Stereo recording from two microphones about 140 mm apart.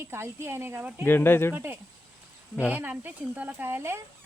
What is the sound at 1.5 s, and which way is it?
Speech, 15° right (ahead or behind).